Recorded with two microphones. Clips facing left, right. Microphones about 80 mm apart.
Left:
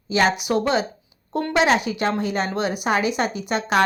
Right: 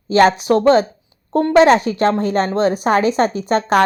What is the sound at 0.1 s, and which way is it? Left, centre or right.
Speech, right.